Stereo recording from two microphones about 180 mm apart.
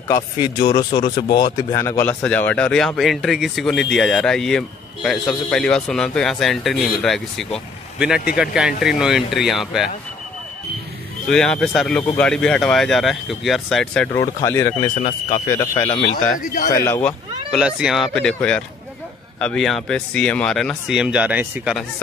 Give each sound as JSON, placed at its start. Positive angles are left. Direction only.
{"t": 0.1, "sound": "speech", "side_deg": 25}
{"t": 1.1, "sound": "speech", "side_deg": 60}
{"t": 1.7, "sound": "a man's voice", "side_deg": 15}
{"t": 11.2, "sound": "a man's voice", "side_deg": 5}
{"t": 14.1, "sound": "speech", "side_deg": 15}
{"t": 15.0, "sound": "speech", "side_deg": 40}
{"t": 15.4, "sound": "speech", "side_deg": 15}
{"t": 16.3, "sound": "a man's voice", "side_deg": 50}
{"t": 16.7, "sound": "speech", "side_deg": 10}
{"t": 17.5, "sound": "a man's voice", "side_deg": -5}